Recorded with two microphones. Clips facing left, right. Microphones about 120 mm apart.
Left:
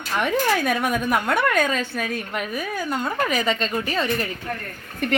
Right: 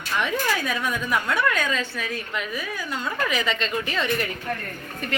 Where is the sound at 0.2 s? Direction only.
50° left (ahead or behind).